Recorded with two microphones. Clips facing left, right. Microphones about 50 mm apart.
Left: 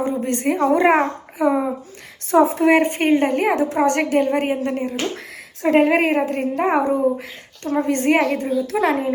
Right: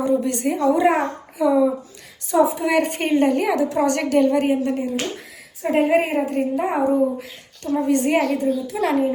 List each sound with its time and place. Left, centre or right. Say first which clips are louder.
0.0 s a sound: right 1 dB; left
0.5 s a child's voice: left 2 dB; left
2.7 s a woman's voice: left 2 dB; left
5.6 s a woman's voice: left 3 dB; left